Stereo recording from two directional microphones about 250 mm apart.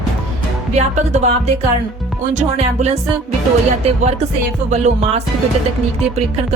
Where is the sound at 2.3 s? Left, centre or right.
Right.